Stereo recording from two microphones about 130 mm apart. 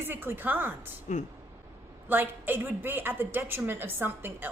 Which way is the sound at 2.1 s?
15° right (ahead or behind).